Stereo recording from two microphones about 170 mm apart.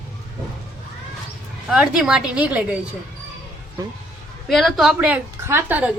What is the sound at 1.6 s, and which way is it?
A woman's voice, 5° right (ahead or behind).